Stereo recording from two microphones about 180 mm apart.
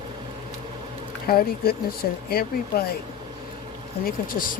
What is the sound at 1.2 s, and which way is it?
Speech, 55° left (ahead or behind).